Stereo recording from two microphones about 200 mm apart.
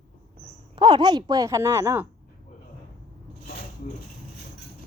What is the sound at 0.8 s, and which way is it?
A woman's voice, 20° right (ahead or behind).